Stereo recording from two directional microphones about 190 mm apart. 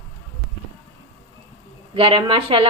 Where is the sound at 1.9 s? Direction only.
30° right (ahead or behind).